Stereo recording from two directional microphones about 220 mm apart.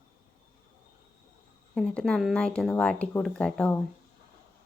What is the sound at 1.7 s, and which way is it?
Speech, 5° left (ahead or behind).